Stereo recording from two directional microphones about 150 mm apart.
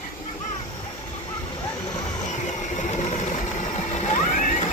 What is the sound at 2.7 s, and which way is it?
Vehicle, 55° left (ahead or behind).